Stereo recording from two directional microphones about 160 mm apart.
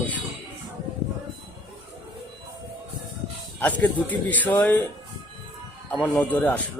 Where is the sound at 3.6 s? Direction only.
10° left (ahead or behind).